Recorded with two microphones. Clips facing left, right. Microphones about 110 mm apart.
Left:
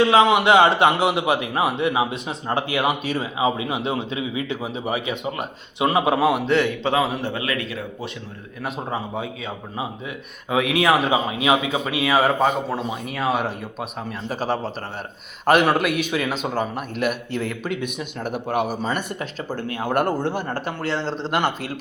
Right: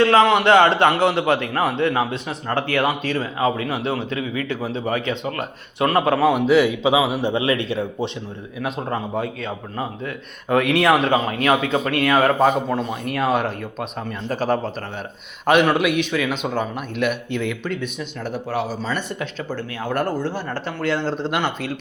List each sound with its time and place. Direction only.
0.0 s a man's voice: 15° left (ahead or behind)
6.3 s a man's voice: 5° right (ahead or behind)
7.2 s speech: 20° right (ahead or behind)
8.6 s a man's voice: centre (ahead or behind)
17.7 s a man's voice: 15° left (ahead or behind)
18.9 s speech: 45° left (ahead or behind)